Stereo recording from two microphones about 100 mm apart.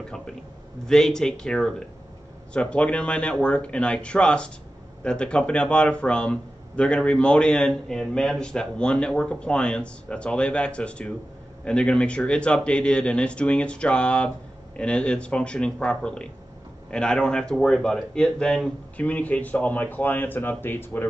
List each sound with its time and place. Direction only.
0.8 s speech: 5° left (ahead or behind)